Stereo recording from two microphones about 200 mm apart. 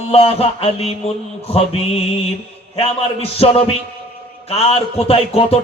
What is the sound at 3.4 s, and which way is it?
Music, 30° left (ahead or behind).